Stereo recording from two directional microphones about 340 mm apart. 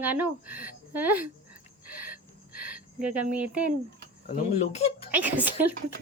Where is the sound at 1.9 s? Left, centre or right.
Right.